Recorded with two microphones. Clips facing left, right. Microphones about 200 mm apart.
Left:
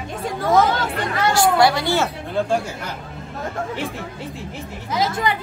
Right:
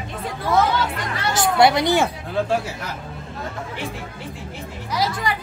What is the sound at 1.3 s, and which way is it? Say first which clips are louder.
Speech: even; 20° right (ahead or behind).